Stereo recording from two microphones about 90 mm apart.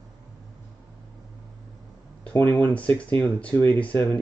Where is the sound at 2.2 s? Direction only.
20° left (ahead or behind).